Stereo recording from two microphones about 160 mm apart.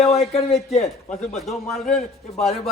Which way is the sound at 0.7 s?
40° left (ahead or behind).